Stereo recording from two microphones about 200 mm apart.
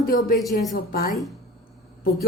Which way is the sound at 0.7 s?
50° left (ahead or behind).